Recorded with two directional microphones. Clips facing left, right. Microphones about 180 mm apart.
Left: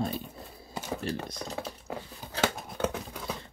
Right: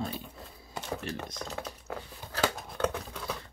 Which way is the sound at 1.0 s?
35° left (ahead or behind).